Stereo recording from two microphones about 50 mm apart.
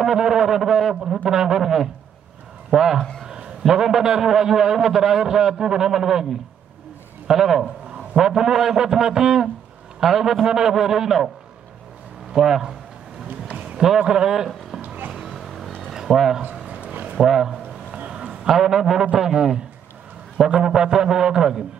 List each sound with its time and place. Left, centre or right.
0.0 s a man's voice: centre
3.0 s a man's voice: centre
3.3 s a man's voice: centre
7.2 s a man's voice: centre
12.3 s a man's voice: centre
13.9 s a man's voice: centre
15.1 s vehicle: centre
15.9 s a sound: centre
17.2 s speech: centre
17.9 s a sound: centre
18.5 s a man's voice: centre
20.6 s a man's voice: centre